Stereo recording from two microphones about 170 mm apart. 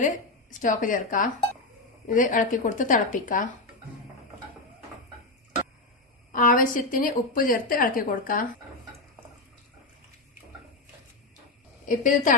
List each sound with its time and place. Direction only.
0.6 s a woman's voice: 50° left (ahead or behind)
6.3 s a woman's voice: 50° left (ahead or behind)
11.9 s a woman's voice: 50° left (ahead or behind)